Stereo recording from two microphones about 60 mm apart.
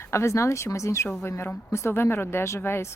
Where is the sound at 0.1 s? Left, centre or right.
Left.